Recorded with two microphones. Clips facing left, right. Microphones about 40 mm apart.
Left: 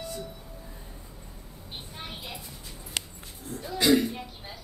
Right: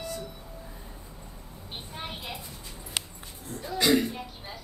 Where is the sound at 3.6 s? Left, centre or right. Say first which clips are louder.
Left 1 dB; centre.